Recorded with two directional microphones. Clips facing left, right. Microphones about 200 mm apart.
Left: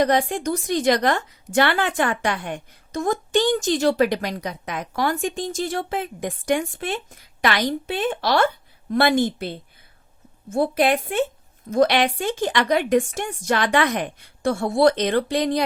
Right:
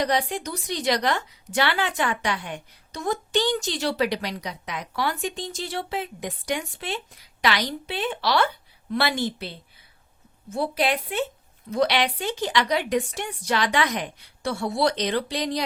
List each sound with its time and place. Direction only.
0.0 s a woman's voice: 50° left (ahead or behind)